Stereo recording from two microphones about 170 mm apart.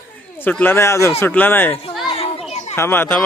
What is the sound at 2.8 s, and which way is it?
Speech, 15° left (ahead or behind).